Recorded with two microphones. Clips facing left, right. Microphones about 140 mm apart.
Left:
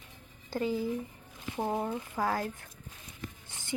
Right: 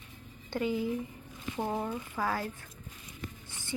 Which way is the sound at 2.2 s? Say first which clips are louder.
Left 2 dB; 40° left (ahead or behind).